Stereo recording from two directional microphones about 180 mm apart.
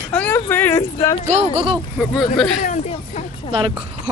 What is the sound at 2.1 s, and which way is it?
Speech, centre (ahead or behind).